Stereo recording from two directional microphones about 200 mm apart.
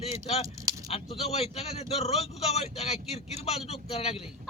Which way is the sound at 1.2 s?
30° left (ahead or behind).